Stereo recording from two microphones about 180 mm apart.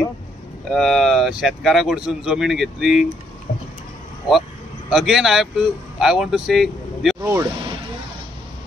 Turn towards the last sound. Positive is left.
turn(degrees=-15)  # may be behind; listen again after turning